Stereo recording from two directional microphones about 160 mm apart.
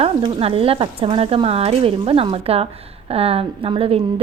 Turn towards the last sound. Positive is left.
turn(degrees=-35)  # may be behind; listen again after turning